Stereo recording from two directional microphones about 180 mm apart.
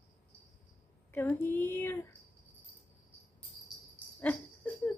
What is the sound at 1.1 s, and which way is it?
Speech, 10° left (ahead or behind).